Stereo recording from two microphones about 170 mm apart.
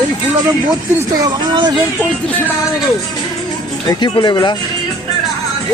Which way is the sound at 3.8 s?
25° left (ahead or behind).